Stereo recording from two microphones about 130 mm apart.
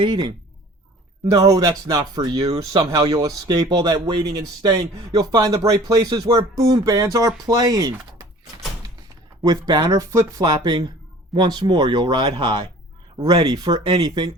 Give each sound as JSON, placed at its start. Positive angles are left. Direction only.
{"t": 0.0, "sound": "speech", "side_deg": -35}
{"t": 1.3, "sound": "speech", "side_deg": -25}
{"t": 9.4, "sound": "speech", "side_deg": -30}